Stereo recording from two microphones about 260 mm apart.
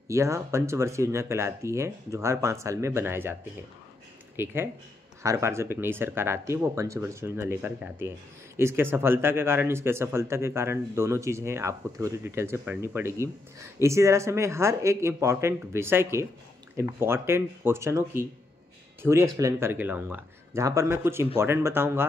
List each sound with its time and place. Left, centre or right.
0.1 s speech: centre
4.4 s speech: centre